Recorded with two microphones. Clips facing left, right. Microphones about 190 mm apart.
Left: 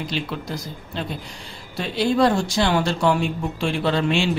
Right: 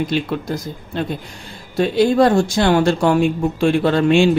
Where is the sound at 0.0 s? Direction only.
50° right (ahead or behind).